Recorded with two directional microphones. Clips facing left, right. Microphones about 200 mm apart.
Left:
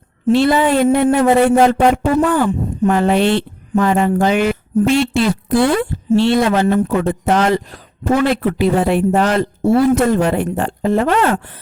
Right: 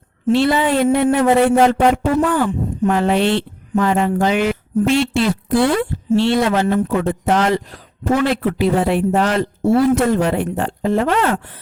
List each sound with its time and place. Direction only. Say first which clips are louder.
0.3 s speech: left 2 dB; 45° left (ahead or behind)